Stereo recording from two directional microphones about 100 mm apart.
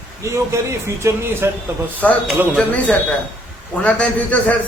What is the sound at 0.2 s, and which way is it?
Speech, 30° right (ahead or behind).